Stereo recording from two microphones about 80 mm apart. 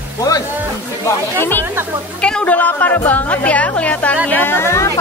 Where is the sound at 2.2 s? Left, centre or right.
Centre.